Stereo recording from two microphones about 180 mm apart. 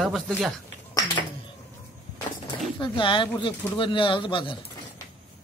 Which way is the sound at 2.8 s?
25° left (ahead or behind).